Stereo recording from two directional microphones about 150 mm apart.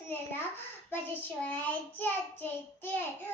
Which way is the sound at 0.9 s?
10° left (ahead or behind).